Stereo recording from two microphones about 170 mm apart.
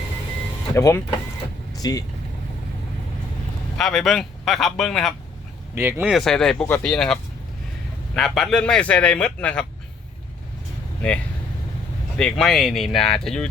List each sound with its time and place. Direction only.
0.8 s speech: 20° left (ahead or behind)
3.8 s speech: centre (ahead or behind)
5.7 s speech: 15° right (ahead or behind)
6.1 s speech: centre (ahead or behind)
12.1 s speech: 5° left (ahead or behind)